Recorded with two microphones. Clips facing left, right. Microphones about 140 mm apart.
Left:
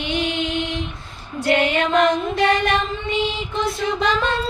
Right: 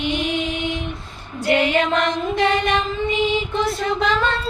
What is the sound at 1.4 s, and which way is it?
Music, centre (ahead or behind).